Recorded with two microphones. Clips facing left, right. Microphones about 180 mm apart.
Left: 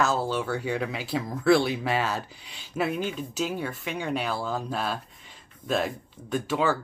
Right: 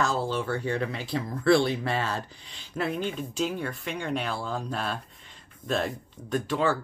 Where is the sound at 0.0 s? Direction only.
5° left (ahead or behind).